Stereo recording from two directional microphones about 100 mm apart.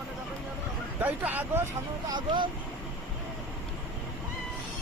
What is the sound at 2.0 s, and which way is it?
Speech, 50° right (ahead or behind).